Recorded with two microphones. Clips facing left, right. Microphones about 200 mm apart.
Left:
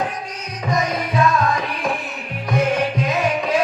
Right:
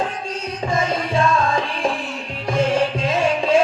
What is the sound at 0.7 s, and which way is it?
Music, 30° right (ahead or behind).